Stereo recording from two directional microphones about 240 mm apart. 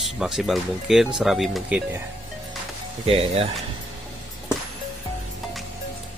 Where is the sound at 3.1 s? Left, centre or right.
Right.